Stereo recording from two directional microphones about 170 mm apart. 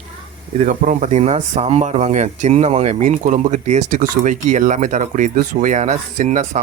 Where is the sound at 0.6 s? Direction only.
45° right (ahead or behind).